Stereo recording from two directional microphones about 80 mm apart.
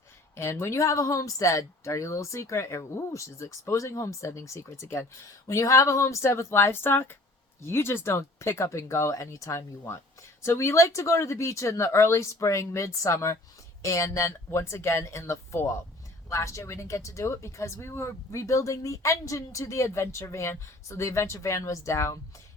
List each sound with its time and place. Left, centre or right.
0.3 s speech: left